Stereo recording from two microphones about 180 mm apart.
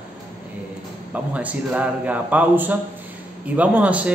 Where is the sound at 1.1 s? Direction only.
10° right (ahead or behind).